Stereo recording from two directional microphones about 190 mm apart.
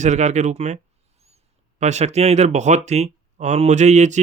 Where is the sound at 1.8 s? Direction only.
35° right (ahead or behind).